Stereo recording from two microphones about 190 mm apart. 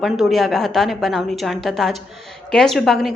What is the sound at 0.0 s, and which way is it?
A woman's voice, centre (ahead or behind).